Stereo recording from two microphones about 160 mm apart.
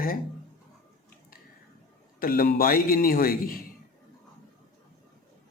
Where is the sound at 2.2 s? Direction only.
60° left (ahead or behind).